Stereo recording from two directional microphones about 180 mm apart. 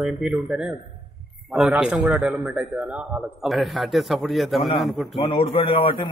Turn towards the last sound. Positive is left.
turn(degrees=30)  # may be behind; listen again after turning